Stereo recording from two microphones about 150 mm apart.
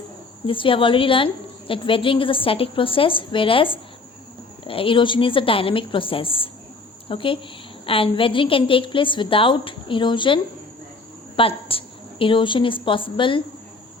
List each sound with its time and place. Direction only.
0.4 s a woman's voice: 35° left (ahead or behind)